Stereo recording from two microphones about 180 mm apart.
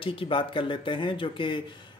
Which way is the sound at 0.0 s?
30° left (ahead or behind).